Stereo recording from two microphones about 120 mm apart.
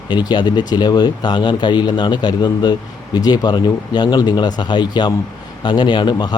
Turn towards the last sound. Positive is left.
turn(degrees=35)  # may be behind; listen again after turning